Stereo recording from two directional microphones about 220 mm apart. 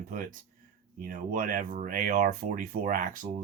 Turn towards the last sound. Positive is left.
turn(degrees=-35)  # may be behind; listen again after turning